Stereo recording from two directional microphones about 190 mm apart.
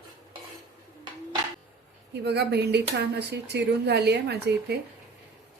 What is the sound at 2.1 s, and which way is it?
Speech, 60° right (ahead or behind).